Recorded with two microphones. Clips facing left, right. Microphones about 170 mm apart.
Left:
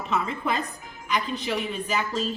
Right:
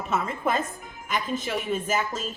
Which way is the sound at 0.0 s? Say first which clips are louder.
Right 1 dB; 45° right (ahead or behind).